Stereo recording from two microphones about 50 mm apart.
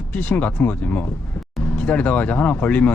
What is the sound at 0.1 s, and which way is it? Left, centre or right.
Speech, left.